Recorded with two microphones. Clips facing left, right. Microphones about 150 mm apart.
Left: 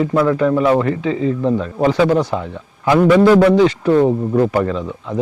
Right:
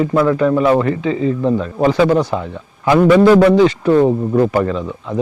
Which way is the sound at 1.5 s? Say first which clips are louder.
Right 1 dB; 30° right (ahead or behind).